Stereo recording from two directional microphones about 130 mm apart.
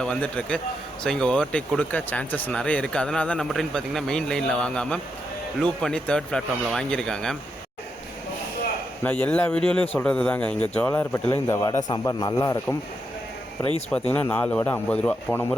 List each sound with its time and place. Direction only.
0.0 s speech: 10° left (ahead or behind)
9.0 s a man's voice: 10° left (ahead or behind)
14.1 s speech: 10° left (ahead or behind)